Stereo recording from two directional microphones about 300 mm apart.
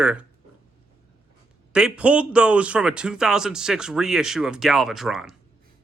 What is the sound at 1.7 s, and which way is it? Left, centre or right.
Speech, centre.